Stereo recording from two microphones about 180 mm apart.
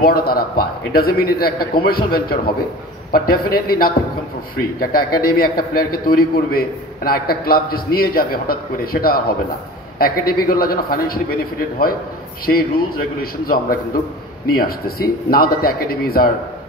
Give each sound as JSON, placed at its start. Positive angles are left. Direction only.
{"t": 0.0, "sound": "a man's voice", "side_deg": 55}
{"t": 12.4, "sound": "a man's voice", "side_deg": 55}